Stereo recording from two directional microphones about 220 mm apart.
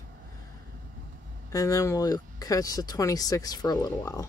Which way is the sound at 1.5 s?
15° left (ahead or behind).